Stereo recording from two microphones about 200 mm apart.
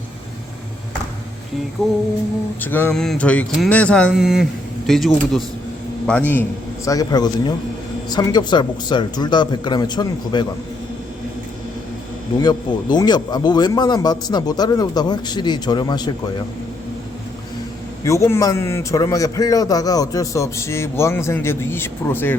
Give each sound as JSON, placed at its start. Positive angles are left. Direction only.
{"t": 1.8, "sound": "a man's voice", "side_deg": 0}
{"t": 12.4, "sound": "speech", "side_deg": 20}
{"t": 18.0, "sound": "a man's voice", "side_deg": 15}